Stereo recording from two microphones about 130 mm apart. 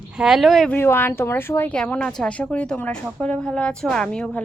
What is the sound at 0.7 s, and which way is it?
A woman's voice, 15° left (ahead or behind).